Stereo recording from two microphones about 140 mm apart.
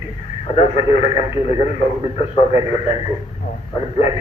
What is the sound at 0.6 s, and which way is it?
Speech, 50° left (ahead or behind).